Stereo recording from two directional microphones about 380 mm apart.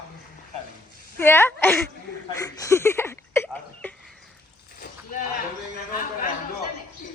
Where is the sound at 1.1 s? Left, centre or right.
Centre.